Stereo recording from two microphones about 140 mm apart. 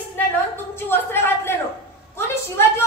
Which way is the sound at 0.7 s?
15° left (ahead or behind).